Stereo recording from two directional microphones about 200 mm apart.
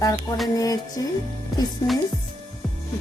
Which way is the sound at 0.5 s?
20° left (ahead or behind).